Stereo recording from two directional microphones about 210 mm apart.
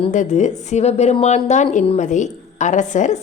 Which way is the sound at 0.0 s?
35° left (ahead or behind).